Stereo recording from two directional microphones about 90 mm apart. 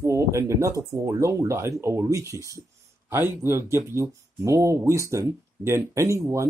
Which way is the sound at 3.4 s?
30° right (ahead or behind).